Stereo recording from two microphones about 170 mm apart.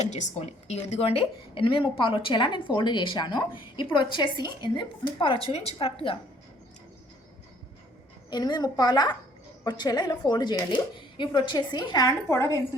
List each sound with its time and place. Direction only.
0.0 s a woman's voice: 40° left (ahead or behind)
8.3 s a woman's voice: 25° left (ahead or behind)